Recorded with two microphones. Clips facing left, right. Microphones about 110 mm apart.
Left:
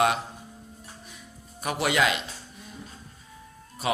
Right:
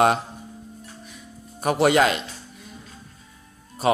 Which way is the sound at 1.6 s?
40° right (ahead or behind).